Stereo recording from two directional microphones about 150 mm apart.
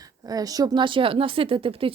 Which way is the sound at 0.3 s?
25° right (ahead or behind).